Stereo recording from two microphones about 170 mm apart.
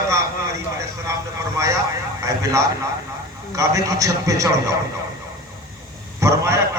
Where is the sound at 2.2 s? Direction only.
20° right (ahead or behind).